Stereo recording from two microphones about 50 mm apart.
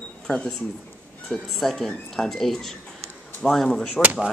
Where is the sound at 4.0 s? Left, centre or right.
Right.